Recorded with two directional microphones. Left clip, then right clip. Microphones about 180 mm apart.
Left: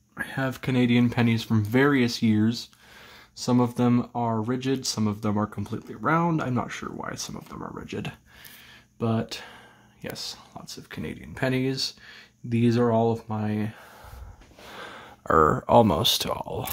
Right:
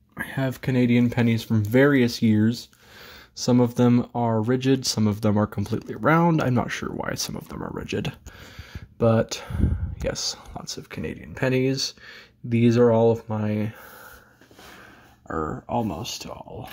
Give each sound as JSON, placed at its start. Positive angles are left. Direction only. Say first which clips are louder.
{"t": 0.1, "sound": "a sound", "louder": "right 1 dB", "side_deg": -35}
{"t": 0.5, "sound": "speech", "louder": "right 2 dB", "side_deg": -20}
{"t": 10.9, "sound": "speech", "louder": "right 3 dB", "side_deg": -15}
{"t": 14.8, "sound": "speech", "louder": "left 8 dB", "side_deg": 30}